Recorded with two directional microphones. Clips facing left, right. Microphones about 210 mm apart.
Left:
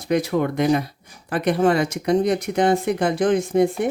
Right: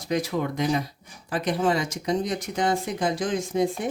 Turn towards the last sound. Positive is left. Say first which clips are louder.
# left 6 dB
turn(degrees=60)  # may be behind; listen again after turning